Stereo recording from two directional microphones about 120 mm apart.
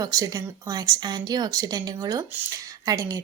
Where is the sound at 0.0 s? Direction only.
30° right (ahead or behind).